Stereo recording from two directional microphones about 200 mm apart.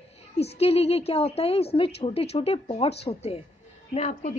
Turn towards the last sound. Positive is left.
turn(degrees=35)  # may be behind; listen again after turning